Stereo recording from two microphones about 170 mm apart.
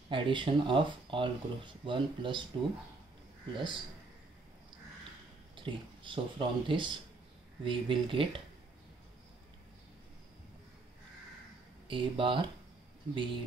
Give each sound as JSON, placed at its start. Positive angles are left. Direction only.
{"t": 0.1, "sound": "speech", "side_deg": -30}
{"t": 3.5, "sound": "speech", "side_deg": -30}
{"t": 5.6, "sound": "speech", "side_deg": -30}
{"t": 11.9, "sound": "speech", "side_deg": -30}